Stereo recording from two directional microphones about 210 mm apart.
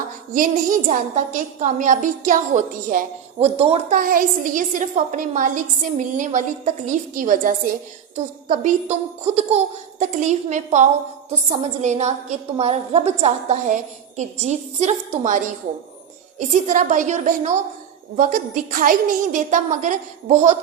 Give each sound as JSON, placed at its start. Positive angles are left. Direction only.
{"t": 0.3, "sound": "a woman's voice", "side_deg": -40}
{"t": 3.3, "sound": "speech", "side_deg": -25}
{"t": 3.9, "sound": "a woman's voice", "side_deg": -40}
{"t": 16.6, "sound": "a woman's voice", "side_deg": -35}